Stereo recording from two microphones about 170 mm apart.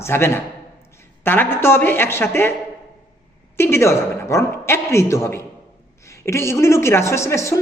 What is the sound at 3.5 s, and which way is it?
A woman's voice, 15° left (ahead or behind).